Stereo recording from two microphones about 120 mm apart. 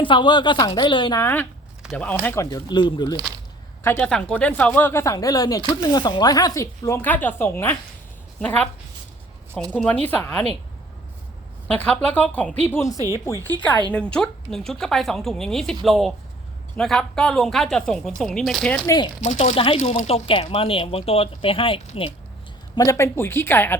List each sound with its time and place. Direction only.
0.0 s speech: 40° left (ahead or behind)
1.2 s speech: 15° left (ahead or behind); by 3.2 s 35° left (ahead or behind)
3.8 s speech: 15° left (ahead or behind)
9.7 s speech: 10° left (ahead or behind)
11.7 s speech: 10° left (ahead or behind)
18.9 s speech: 40° left (ahead or behind)
19.2 s speech: 75° left (ahead or behind)
19.5 s speech: 50° left (ahead or behind)
22.7 s speech: 30° left (ahead or behind)